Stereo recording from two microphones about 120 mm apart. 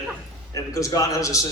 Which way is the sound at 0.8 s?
25° left (ahead or behind).